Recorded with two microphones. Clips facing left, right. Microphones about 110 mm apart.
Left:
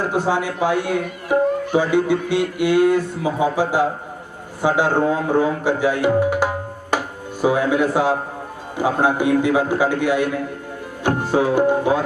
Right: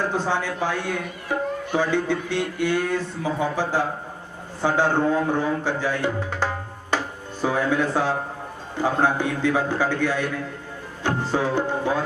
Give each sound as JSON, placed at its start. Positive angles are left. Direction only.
{"t": 0.1, "sound": "speech", "side_deg": 15}
{"t": 5.4, "sound": "tabla", "side_deg": 15}
{"t": 7.4, "sound": "speech", "side_deg": 15}
{"t": 11.0, "sound": "music", "side_deg": 15}